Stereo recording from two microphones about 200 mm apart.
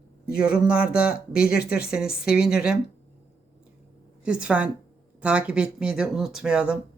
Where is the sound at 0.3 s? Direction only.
50° left (ahead or behind).